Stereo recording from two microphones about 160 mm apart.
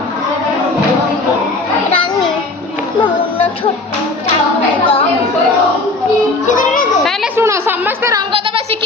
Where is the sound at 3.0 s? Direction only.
35° left (ahead or behind).